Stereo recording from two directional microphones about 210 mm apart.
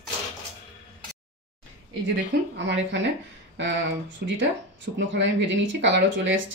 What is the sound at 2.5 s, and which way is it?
Speech, 55° right (ahead or behind).